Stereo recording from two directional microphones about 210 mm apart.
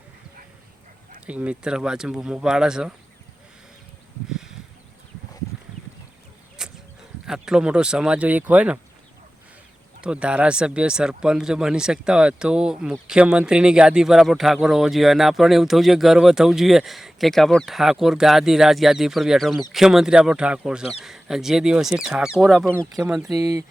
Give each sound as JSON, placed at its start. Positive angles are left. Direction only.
{"t": 1.3, "sound": "speech", "side_deg": -5}
{"t": 6.6, "sound": "a sound", "side_deg": -5}
{"t": 7.3, "sound": "speech", "side_deg": -5}
{"t": 10.0, "sound": "speech", "side_deg": -5}
{"t": 23.0, "sound": "speech", "side_deg": -10}